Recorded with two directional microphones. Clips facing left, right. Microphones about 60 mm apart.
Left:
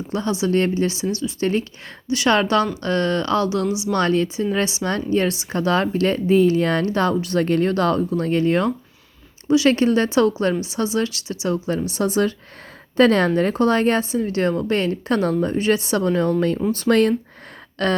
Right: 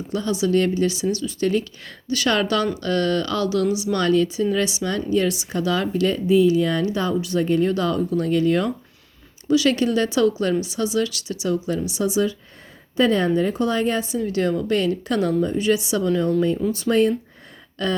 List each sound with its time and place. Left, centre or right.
0.1 s a woman's voice: left
11.9 s speech: left
13.0 s speech: left
14.1 s a woman's voice: left
16.9 s speech: left
17.8 s speech: left